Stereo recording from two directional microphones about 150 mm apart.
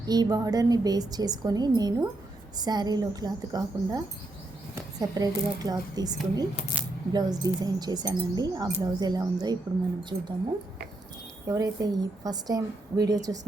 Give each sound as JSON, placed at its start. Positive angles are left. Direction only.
{"t": 0.0, "sound": "speech", "side_deg": -25}
{"t": 6.8, "sound": "coin", "side_deg": -10}
{"t": 7.1, "sound": "speech", "side_deg": -25}
{"t": 11.4, "sound": "speech", "side_deg": -20}